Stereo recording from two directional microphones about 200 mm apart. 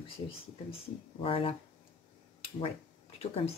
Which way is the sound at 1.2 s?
30° left (ahead or behind).